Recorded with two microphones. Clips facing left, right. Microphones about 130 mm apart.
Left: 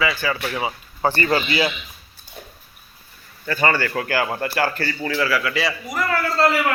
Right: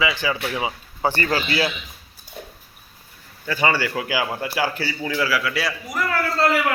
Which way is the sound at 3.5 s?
10° right (ahead or behind).